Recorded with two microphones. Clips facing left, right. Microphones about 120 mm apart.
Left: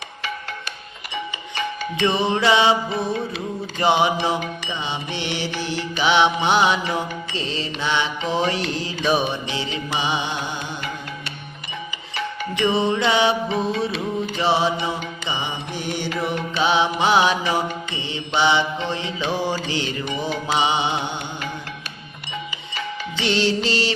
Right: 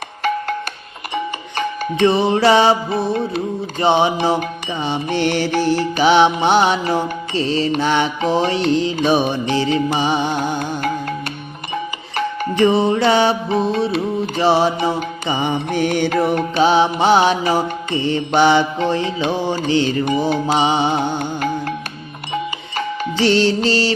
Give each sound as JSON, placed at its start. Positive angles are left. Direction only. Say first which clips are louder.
{"t": 1.1, "sound": "music", "louder": "right 6 dB", "side_deg": -45}
{"t": 19.3, "sound": "music", "louder": "right 4 dB", "side_deg": -25}